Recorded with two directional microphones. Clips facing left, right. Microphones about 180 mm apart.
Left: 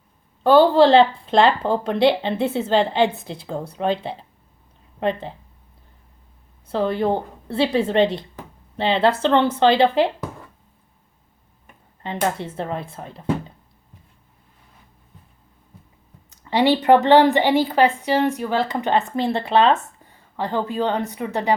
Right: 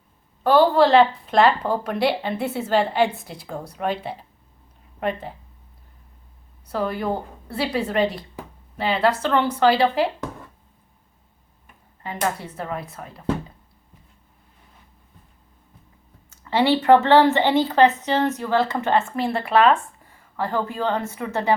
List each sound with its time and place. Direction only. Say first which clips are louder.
0.4 s speech: left 3 dB; 25° left (ahead or behind)
6.7 s speech: left 4 dB; 25° left (ahead or behind)
12.0 s speech: left 2 dB; 25° left (ahead or behind)
16.3 s speech: left 1 dB; 15° left (ahead or behind)